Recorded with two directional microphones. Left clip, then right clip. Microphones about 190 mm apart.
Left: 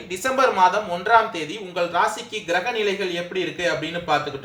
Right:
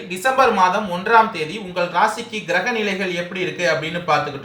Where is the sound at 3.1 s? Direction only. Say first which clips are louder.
Right 2 dB; 40° left (ahead or behind).